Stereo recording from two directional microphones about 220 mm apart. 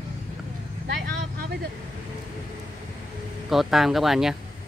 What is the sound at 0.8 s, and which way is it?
Vehicle, 50° right (ahead or behind).